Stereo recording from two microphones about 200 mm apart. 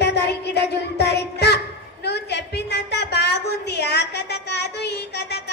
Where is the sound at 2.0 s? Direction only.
55° left (ahead or behind).